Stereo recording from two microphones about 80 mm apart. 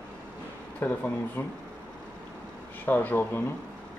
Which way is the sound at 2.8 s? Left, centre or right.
Left.